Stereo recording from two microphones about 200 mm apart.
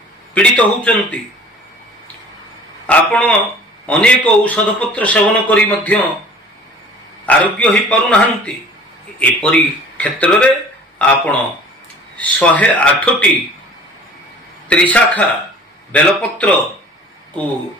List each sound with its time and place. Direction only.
0.3 s a man's voice: 5° left (ahead or behind)
2.9 s a man's voice: 5° left (ahead or behind)
7.2 s a man's voice: 5° left (ahead or behind)
14.7 s a man's voice: 5° left (ahead or behind)